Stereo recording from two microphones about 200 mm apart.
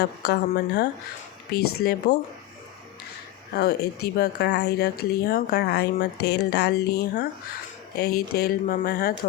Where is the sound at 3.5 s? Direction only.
55° left (ahead or behind).